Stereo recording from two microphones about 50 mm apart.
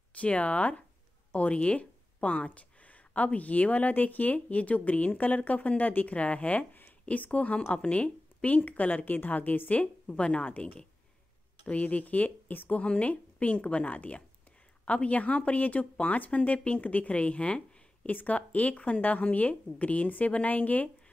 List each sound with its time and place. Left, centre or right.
0.1 s speech: left